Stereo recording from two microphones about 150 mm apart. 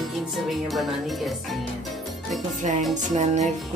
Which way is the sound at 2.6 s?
55° right (ahead or behind).